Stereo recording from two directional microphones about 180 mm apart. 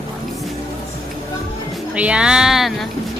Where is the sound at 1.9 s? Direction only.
5° right (ahead or behind).